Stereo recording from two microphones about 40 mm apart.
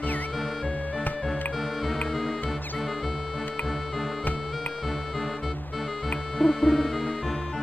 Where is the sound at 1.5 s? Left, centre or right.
Centre.